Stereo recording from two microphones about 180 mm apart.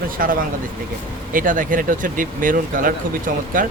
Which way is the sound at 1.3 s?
50° right (ahead or behind).